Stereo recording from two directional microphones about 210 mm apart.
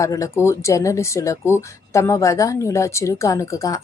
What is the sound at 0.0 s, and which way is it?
Speech, 15° left (ahead or behind).